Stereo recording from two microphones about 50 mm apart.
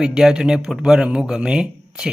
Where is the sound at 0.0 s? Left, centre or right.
Centre.